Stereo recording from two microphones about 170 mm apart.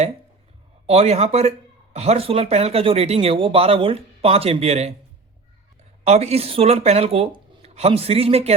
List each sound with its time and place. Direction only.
0.9 s speech: 40° right (ahead or behind)
6.1 s speech: 40° right (ahead or behind)